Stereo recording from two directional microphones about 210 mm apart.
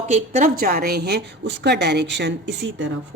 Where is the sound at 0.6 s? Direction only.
45° right (ahead or behind).